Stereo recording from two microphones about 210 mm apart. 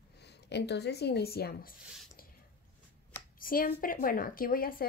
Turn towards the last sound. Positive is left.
turn(degrees=45)  # may be behind; listen again after turning